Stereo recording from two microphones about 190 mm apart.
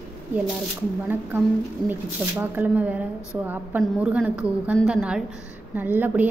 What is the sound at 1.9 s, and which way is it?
A woman's voice, 10° right (ahead or behind).